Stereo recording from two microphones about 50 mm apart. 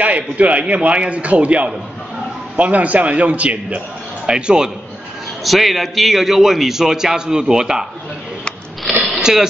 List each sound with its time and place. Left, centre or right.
0.0 s a man's voice: right
5.4 s a man's voice: centre
8.9 s a sound: centre
9.2 s speech: centre